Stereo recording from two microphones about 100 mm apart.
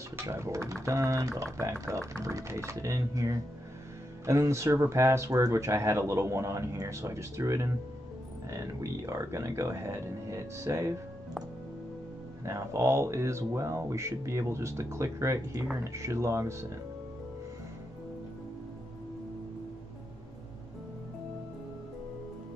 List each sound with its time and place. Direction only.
0.1 s speech: 30° right (ahead or behind)
12.4 s speech: 30° right (ahead or behind)